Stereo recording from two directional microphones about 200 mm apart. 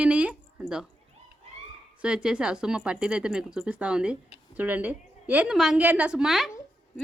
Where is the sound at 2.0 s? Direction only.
5° right (ahead or behind).